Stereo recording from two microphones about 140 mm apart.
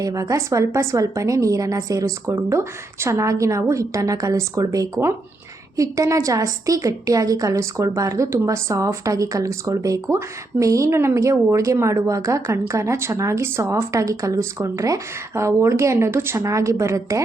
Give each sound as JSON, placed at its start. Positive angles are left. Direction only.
{"t": 0.0, "sound": "a woman's voice", "side_deg": -25}